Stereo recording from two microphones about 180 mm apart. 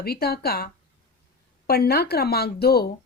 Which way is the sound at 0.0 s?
60° left (ahead or behind).